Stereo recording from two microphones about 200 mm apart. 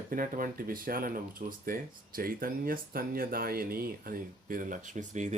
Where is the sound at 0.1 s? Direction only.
45° right (ahead or behind).